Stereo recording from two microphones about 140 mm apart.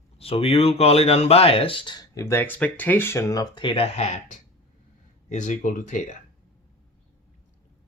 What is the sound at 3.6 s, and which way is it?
Speech, 40° left (ahead or behind).